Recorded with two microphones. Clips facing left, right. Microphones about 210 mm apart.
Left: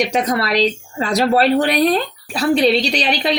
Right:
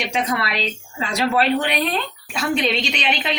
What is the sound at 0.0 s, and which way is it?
Speech, 40° left (ahead or behind).